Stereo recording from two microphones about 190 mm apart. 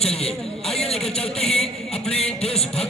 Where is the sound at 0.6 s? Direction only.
Centre (ahead or behind).